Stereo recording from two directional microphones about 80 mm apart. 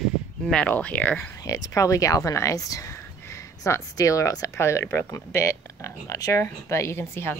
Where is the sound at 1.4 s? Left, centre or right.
Left.